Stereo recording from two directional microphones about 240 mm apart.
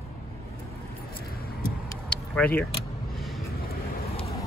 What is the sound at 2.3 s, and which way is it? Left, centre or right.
Speech, centre.